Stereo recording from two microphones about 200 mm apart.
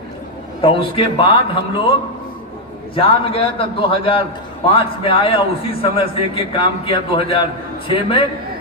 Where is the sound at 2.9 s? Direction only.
25° left (ahead or behind).